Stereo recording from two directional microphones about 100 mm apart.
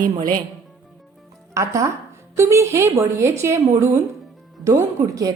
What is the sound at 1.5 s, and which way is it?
A woman's voice, 30° right (ahead or behind).